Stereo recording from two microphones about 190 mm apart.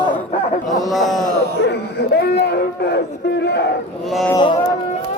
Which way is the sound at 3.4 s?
60° left (ahead or behind).